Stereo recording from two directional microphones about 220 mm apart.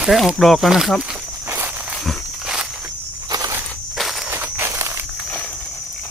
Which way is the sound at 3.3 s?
15° right (ahead or behind).